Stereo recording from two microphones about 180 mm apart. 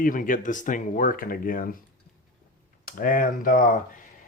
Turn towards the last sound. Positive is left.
turn(degrees=50)  # may be behind; listen again after turning